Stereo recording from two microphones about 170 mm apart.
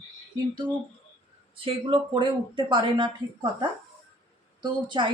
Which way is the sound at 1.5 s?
30° right (ahead or behind).